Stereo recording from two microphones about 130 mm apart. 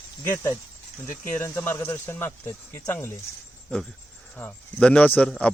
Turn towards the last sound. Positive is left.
turn(degrees=10)  # may be behind; listen again after turning